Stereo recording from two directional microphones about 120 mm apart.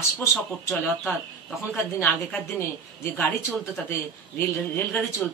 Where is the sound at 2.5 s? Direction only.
20° left (ahead or behind).